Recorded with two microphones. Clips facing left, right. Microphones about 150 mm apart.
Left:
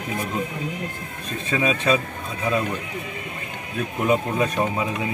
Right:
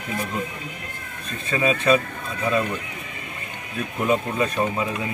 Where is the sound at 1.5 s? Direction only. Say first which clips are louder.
Right 2 dB; 15° left (ahead or behind).